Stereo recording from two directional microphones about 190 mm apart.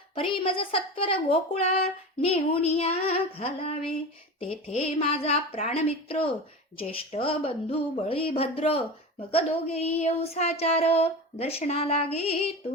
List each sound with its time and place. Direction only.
0.2 s a woman's voice: 30° left (ahead or behind)